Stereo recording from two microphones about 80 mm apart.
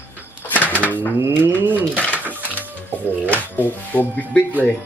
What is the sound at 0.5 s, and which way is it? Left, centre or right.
Bird, left.